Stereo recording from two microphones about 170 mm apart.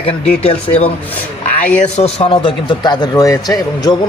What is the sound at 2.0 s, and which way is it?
A man's voice, 40° left (ahead or behind).